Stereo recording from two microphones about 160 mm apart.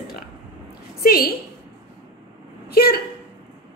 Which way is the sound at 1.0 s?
70° left (ahead or behind).